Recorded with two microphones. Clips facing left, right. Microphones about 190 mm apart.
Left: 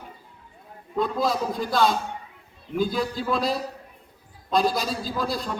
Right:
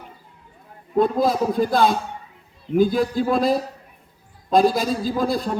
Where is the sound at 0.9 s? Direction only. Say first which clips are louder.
Right 6 dB; 50° right (ahead or behind).